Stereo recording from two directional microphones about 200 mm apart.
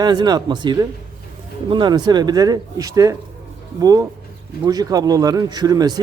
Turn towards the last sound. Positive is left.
turn(degrees=-20)  # may be behind; listen again after turning